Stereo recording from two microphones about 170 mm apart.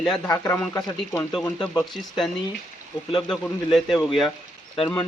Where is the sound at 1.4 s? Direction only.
5° left (ahead or behind).